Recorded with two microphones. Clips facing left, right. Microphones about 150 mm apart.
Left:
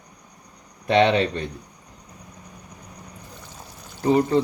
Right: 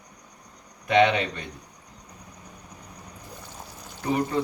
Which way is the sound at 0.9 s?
35° left (ahead or behind).